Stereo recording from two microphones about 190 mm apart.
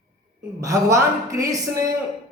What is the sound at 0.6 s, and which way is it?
A woman's voice, 15° right (ahead or behind).